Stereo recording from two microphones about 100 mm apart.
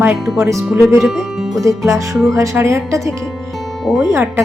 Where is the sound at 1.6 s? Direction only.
30° right (ahead or behind).